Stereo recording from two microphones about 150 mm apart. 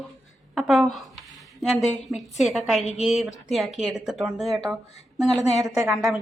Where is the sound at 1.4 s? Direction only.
Centre (ahead or behind).